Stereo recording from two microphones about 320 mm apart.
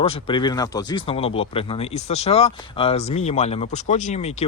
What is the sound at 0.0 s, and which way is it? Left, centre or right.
Speech, centre.